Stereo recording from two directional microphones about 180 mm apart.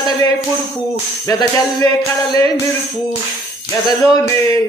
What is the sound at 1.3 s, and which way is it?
Music, 20° left (ahead or behind).